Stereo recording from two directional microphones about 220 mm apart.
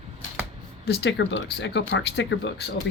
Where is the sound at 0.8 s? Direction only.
50° left (ahead or behind).